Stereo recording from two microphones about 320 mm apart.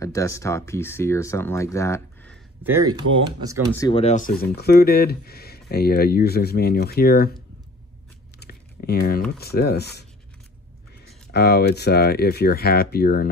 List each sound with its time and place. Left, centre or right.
0.0 s speech: centre
2.6 s speech: centre
3.7 s speech: centre
8.4 s speech: left
11.3 s speech: left